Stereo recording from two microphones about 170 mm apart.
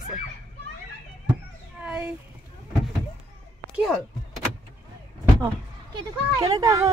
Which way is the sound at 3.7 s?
Centre (ahead or behind).